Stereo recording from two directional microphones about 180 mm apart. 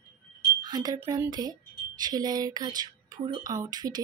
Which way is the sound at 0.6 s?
20° right (ahead or behind).